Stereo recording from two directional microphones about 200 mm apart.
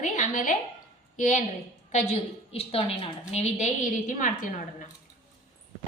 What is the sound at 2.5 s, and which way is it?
A woman's voice, 30° left (ahead or behind).